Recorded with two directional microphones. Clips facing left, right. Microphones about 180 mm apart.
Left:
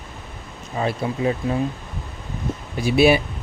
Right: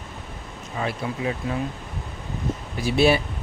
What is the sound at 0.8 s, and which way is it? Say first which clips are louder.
Speech: left 4 dB; 30° left (ahead or behind).